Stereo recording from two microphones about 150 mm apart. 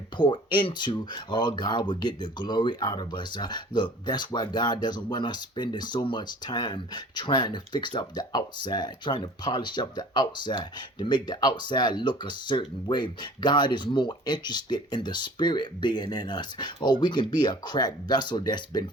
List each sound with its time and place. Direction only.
0.2 s speech: 30° left (ahead or behind)